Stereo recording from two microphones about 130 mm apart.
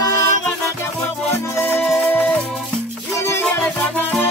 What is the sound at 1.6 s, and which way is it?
Music, 15° left (ahead or behind).